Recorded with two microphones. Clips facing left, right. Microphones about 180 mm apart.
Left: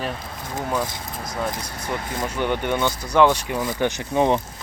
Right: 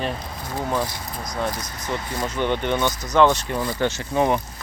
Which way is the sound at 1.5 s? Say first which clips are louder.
Even; 30° left (ahead or behind).